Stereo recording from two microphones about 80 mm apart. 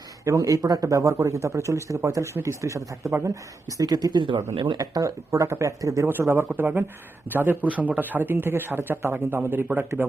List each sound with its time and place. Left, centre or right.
0.3 s speech: right
4.2 s speech: right
4.8 s speech: right
6.3 s speech: right